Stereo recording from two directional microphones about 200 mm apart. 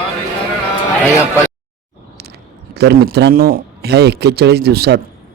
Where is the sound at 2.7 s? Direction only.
55° right (ahead or behind).